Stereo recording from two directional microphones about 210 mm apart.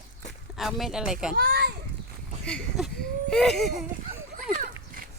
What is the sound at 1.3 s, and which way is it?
Children playing, 50° right (ahead or behind).